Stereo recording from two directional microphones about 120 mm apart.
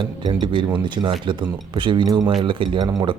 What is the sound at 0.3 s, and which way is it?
Speech, 40° right (ahead or behind).